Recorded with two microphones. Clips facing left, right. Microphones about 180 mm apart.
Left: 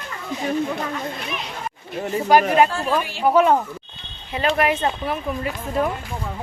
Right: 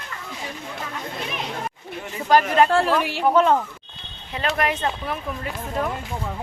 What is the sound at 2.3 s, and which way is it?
Speech, 10° left (ahead or behind).